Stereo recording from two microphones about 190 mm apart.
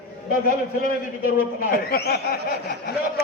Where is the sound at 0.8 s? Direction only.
50° left (ahead or behind).